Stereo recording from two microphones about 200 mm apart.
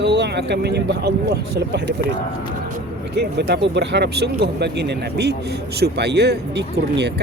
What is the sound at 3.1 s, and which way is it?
Speech, 55° right (ahead or behind).